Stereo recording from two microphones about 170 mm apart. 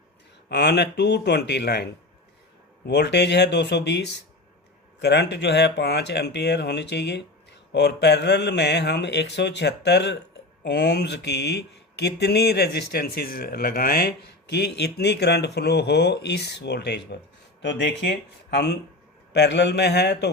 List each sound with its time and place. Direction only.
0.4 s speech: 80° left